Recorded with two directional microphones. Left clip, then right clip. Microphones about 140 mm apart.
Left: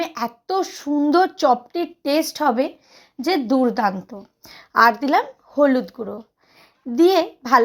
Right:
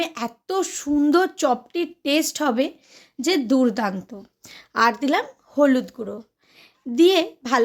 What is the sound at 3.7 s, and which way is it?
A woman's voice, 15° right (ahead or behind).